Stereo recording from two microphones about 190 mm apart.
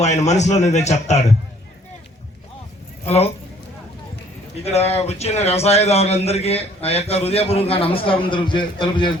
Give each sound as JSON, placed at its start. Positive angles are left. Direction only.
{"t": 0.0, "sound": "speech", "side_deg": 35}
{"t": 4.6, "sound": "speech", "side_deg": 35}